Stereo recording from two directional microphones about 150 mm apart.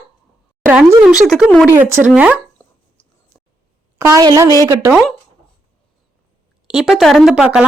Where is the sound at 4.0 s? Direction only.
20° right (ahead or behind).